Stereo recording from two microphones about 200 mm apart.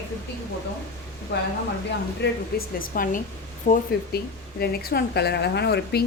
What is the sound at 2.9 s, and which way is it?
A woman's voice, 45° left (ahead or behind).